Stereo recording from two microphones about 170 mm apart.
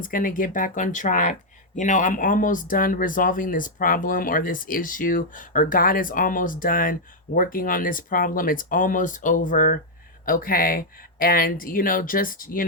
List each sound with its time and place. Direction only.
0.0 s speech: 55° left (ahead or behind)